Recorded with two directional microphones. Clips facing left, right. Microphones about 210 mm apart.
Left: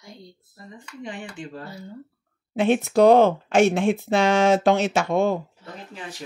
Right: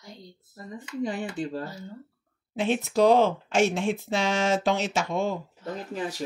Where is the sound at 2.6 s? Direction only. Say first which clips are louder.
Left 5 dB; 60° left (ahead or behind).